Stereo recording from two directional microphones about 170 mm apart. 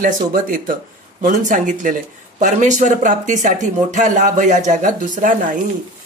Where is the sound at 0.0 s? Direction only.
55° right (ahead or behind).